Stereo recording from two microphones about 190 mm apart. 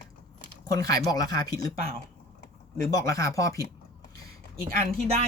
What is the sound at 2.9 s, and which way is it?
Speech, 15° left (ahead or behind).